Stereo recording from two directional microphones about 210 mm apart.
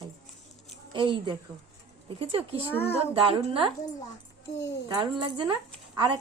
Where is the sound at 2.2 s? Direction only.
30° right (ahead or behind).